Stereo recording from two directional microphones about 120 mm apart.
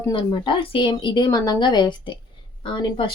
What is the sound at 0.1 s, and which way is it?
Speech, 40° left (ahead or behind).